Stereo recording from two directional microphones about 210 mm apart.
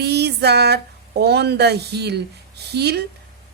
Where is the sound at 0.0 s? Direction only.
50° right (ahead or behind).